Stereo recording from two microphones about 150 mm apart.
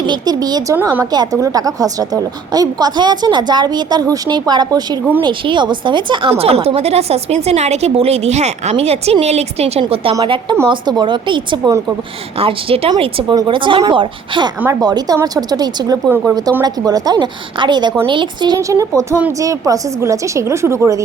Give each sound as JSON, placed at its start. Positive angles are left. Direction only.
{"t": 0.0, "sound": "a woman's voice", "side_deg": -30}
{"t": 0.8, "sound": "speech", "side_deg": -15}
{"t": 1.1, "sound": "a woman's voice", "side_deg": -25}
{"t": 16.0, "sound": "speech", "side_deg": -15}
{"t": 16.6, "sound": "a woman's voice", "side_deg": -25}